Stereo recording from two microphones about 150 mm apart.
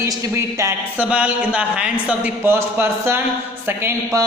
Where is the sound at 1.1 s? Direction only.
10° right (ahead or behind).